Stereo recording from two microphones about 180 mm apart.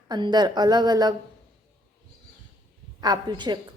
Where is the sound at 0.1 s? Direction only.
25° right (ahead or behind).